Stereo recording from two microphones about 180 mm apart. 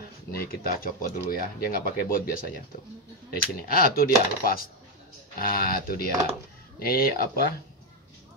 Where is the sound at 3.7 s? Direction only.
55° left (ahead or behind).